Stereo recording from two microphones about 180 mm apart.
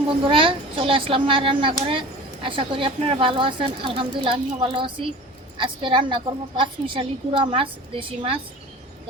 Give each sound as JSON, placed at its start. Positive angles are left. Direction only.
{"t": 0.3, "sound": "a child's voice", "side_deg": -30}